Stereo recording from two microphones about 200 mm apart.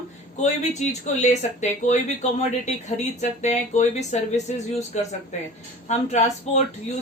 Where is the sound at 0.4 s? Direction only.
35° left (ahead or behind).